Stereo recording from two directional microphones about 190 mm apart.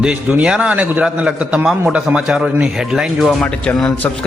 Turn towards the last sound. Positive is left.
turn(degrees=5)  # may be behind; listen again after turning